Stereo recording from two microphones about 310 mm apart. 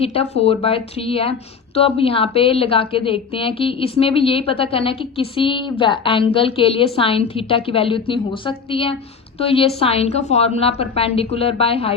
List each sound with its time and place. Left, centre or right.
0.0 s a woman's voice: centre